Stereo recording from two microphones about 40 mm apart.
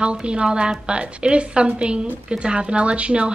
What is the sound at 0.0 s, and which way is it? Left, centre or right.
A woman's voice, right.